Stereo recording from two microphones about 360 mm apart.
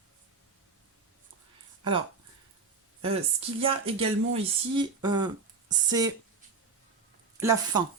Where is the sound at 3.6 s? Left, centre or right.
Centre.